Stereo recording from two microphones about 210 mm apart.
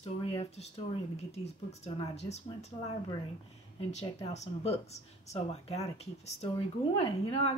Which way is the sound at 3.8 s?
30° left (ahead or behind).